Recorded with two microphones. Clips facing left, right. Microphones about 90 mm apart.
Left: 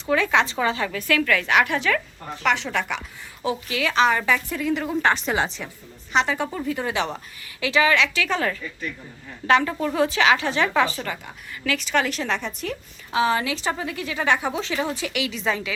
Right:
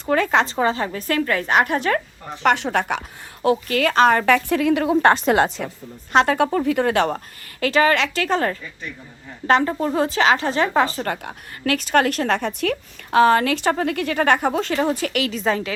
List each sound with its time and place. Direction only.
0.0 s a woman's voice: 45° right (ahead or behind); by 4.9 s 70° right (ahead or behind)
5.0 s a woman's voice: 45° right (ahead or behind)